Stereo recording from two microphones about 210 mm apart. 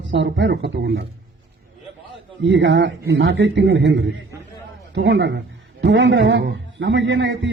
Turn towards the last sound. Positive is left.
turn(degrees=-60)  # may be behind; listen again after turning